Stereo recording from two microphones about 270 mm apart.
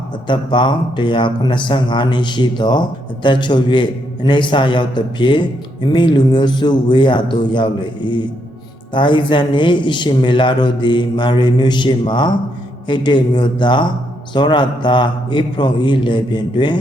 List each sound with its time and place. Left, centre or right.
0.3 s a man's voice: centre